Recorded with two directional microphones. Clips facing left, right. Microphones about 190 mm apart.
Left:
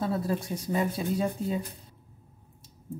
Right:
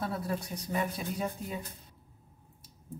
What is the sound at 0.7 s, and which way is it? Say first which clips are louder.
Speech: left 5 dB; 30° left (ahead or behind).